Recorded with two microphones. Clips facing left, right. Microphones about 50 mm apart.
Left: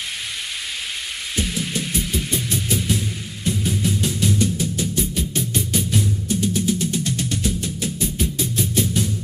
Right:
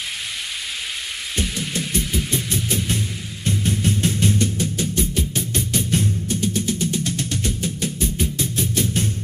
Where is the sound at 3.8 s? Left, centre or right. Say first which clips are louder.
Right 1 dB; right.